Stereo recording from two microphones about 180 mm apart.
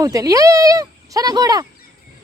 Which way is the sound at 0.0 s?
20° right (ahead or behind).